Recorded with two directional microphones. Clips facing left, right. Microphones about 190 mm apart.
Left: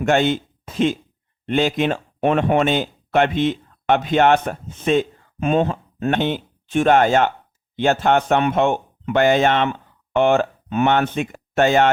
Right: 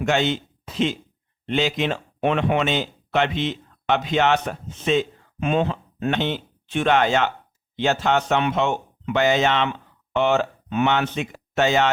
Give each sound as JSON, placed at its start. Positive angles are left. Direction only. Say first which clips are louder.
{"t": 0.0, "sound": "speech", "louder": "left 4 dB", "side_deg": 50}